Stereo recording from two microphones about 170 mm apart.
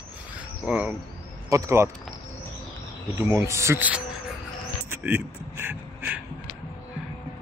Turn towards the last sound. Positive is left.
turn(degrees=-10)  # may be behind; listen again after turning